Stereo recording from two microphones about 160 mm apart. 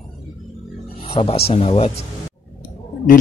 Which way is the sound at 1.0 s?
35° left (ahead or behind).